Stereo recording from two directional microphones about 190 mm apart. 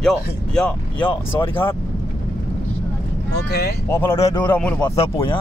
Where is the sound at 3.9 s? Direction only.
10° left (ahead or behind).